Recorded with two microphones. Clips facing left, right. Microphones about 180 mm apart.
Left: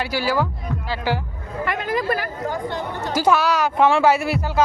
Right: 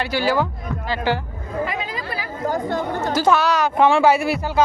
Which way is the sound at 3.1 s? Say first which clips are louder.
Even; 10° left (ahead or behind).